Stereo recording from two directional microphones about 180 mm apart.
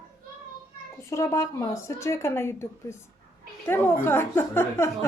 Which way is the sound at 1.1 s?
15° left (ahead or behind).